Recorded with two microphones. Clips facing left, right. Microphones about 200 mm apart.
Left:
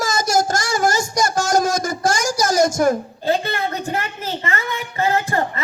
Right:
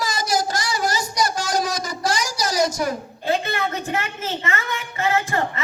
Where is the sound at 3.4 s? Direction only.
35° left (ahead or behind).